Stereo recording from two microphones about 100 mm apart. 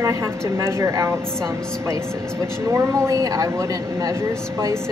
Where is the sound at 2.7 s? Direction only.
30° right (ahead or behind).